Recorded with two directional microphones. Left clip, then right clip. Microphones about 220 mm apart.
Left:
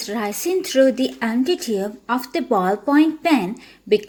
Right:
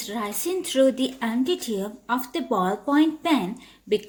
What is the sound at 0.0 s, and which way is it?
Speech, 15° left (ahead or behind).